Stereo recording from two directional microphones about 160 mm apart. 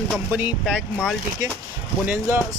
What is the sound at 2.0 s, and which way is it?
Speech, 15° right (ahead or behind).